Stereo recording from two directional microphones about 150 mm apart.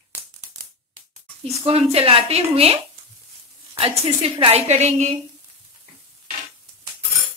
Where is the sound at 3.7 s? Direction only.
40° right (ahead or behind).